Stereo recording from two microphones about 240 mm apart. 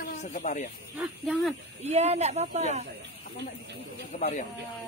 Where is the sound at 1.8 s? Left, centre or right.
Right.